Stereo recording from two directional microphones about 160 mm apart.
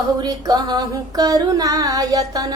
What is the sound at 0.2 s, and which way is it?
Child singing, 25° right (ahead or behind).